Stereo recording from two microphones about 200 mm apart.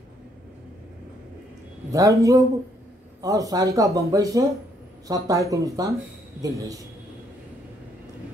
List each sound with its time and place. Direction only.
1.9 s speech: 15° right (ahead or behind)